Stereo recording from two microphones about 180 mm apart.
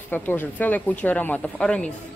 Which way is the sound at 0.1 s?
10° left (ahead or behind).